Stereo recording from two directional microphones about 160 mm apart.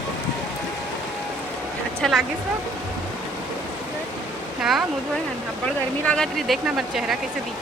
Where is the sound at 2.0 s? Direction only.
Centre (ahead or behind).